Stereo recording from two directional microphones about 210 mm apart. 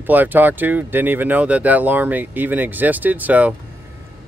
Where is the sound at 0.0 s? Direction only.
10° right (ahead or behind).